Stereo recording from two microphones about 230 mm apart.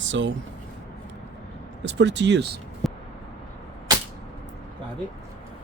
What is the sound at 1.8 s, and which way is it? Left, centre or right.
Speech, right.